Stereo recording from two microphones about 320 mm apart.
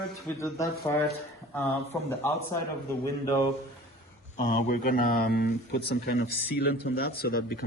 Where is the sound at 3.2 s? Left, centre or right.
Centre.